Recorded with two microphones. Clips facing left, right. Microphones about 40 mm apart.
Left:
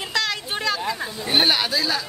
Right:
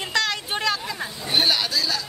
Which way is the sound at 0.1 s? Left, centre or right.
Centre.